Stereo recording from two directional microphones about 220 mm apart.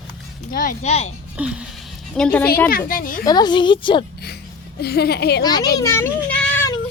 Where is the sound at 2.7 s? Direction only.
40° left (ahead or behind).